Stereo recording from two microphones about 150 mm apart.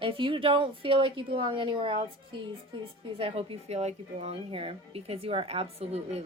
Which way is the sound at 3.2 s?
40° right (ahead or behind).